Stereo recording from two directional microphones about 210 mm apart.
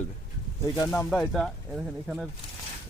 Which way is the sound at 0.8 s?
10° left (ahead or behind).